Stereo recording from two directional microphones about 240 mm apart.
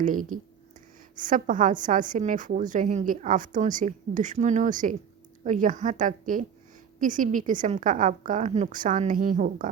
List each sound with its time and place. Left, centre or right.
0.0 s a woman's voice: right